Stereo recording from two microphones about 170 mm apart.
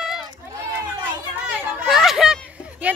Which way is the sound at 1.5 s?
5° right (ahead or behind).